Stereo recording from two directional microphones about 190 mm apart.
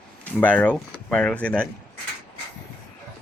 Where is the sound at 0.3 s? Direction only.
10° left (ahead or behind).